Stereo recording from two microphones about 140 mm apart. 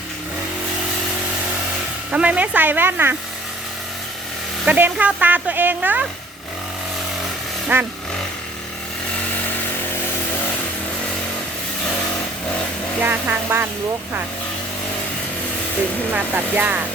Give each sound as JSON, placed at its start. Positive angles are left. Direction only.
{"t": 2.0, "sound": "speech", "side_deg": -10}
{"t": 4.6, "sound": "speech", "side_deg": -10}
{"t": 7.7, "sound": "speech", "side_deg": -15}
{"t": 13.0, "sound": "speech", "side_deg": -15}
{"t": 16.1, "sound": "speech", "side_deg": -10}